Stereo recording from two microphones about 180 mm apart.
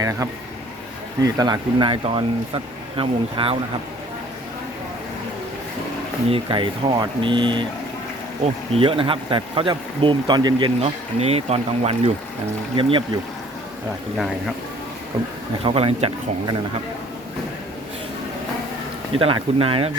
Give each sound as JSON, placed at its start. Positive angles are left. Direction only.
{"t": 0.0, "sound": "speech", "side_deg": -15}
{"t": 6.3, "sound": "speech", "side_deg": -25}
{"t": 8.7, "sound": "speech", "side_deg": -30}
{"t": 15.6, "sound": "speech", "side_deg": -30}
{"t": 19.1, "sound": "speech", "side_deg": -30}